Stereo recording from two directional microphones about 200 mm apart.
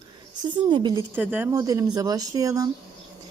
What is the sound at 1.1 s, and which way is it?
Speech, 10° right (ahead or behind).